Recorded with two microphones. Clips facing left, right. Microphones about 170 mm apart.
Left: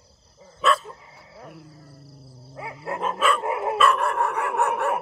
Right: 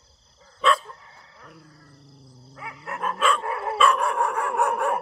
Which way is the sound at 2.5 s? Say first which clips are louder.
Left 4 dB; 25° left (ahead or behind).